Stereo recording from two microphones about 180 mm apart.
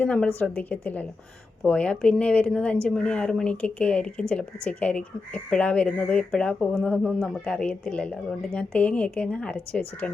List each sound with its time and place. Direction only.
0.0 s a woman's voice: 5° left (ahead or behind)